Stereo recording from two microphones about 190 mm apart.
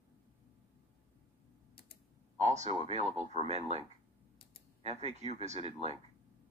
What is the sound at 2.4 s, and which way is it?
Speech, 35° right (ahead or behind).